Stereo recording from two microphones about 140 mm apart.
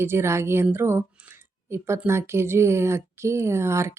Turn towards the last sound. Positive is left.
turn(degrees=-20)  # may be behind; listen again after turning